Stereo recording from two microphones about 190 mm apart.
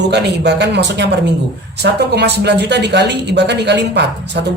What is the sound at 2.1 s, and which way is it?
A woman's voice, 60° right (ahead or behind).